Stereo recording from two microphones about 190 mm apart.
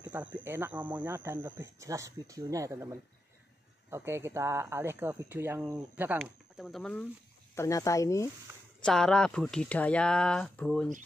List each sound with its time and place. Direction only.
0.1 s speech: 10° right (ahead or behind)
7.5 s speech: 15° left (ahead or behind)
8.8 s speech: 5° left (ahead or behind)